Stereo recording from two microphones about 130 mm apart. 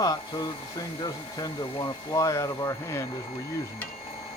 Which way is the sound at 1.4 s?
25° left (ahead or behind).